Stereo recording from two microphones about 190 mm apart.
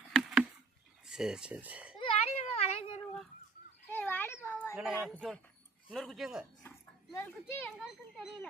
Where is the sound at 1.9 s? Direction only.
30° left (ahead or behind).